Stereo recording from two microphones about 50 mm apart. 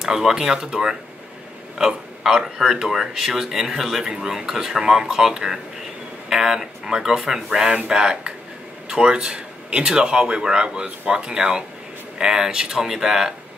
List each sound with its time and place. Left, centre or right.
0.0 s speech: centre